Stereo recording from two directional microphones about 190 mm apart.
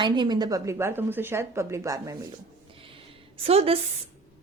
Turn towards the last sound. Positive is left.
turn(degrees=-30)  # may be behind; listen again after turning